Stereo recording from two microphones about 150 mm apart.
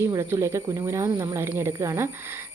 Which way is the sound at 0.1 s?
20° right (ahead or behind).